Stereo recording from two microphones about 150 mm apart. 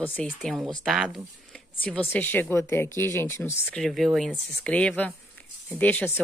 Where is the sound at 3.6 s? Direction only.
Centre (ahead or behind).